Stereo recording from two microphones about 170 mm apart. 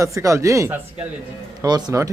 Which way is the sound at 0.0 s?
20° right (ahead or behind).